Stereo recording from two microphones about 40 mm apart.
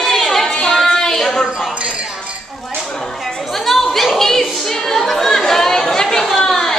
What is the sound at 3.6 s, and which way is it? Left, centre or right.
Chatter, centre.